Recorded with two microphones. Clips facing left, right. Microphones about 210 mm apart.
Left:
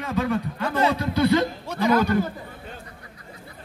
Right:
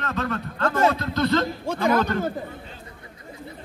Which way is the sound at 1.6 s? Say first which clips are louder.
Left 1 dB; 50° right (ahead or behind).